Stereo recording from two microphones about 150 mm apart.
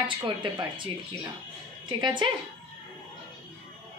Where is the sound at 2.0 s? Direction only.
30° right (ahead or behind).